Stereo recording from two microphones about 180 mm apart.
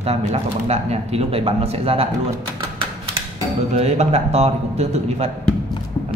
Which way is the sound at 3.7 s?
35° right (ahead or behind).